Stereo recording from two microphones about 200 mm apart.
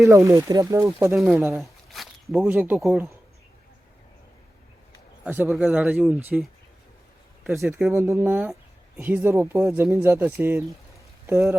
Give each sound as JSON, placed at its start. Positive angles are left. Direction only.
{"t": 0.1, "sound": "speech", "side_deg": -15}
{"t": 1.1, "sound": "speech", "side_deg": 0}
{"t": 1.5, "sound": "a sound", "side_deg": 0}
{"t": 2.4, "sound": "speech", "side_deg": -10}
{"t": 5.2, "sound": "speech", "side_deg": -10}
{"t": 7.4, "sound": "speech", "side_deg": 0}